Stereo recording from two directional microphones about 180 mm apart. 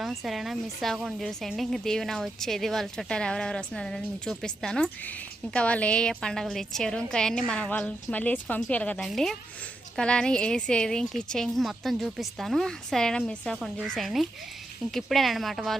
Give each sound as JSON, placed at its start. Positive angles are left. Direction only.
{"t": 0.0, "sound": "a woman's voice", "side_deg": 0}